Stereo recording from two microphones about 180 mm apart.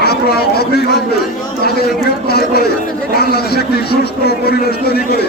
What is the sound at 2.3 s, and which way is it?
Speech, 60° left (ahead or behind).